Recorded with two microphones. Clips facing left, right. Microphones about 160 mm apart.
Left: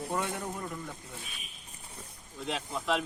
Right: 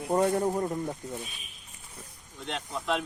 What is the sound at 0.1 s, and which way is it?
Speech, 35° right (ahead or behind).